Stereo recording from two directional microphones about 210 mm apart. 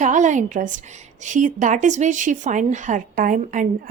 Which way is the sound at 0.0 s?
35° right (ahead or behind).